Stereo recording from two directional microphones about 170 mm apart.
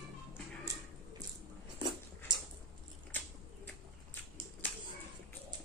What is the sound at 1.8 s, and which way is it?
Dog, 25° right (ahead or behind).